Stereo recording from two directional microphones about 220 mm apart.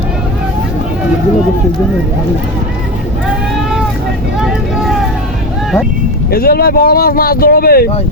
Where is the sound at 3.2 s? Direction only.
Centre (ahead or behind).